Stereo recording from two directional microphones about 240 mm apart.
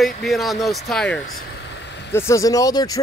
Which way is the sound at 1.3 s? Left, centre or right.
Left.